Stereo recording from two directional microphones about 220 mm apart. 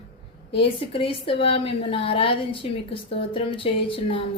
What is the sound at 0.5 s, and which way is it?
A woman's voice, 25° left (ahead or behind).